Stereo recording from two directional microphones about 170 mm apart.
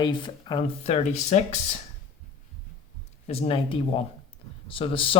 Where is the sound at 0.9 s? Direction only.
40° left (ahead or behind).